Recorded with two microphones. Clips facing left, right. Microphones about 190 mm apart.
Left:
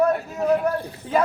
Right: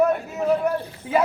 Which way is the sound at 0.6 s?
10° right (ahead or behind).